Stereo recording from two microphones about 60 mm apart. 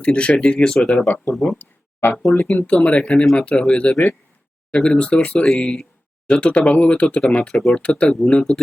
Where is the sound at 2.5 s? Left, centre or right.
Left.